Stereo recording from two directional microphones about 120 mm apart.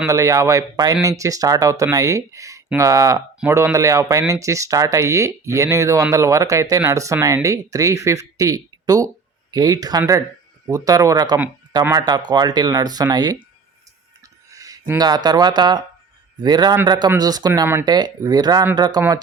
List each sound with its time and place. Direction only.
0.1 s speech: 25° right (ahead or behind)
14.5 s a sound: 30° right (ahead or behind)
14.9 s speech: 35° right (ahead or behind)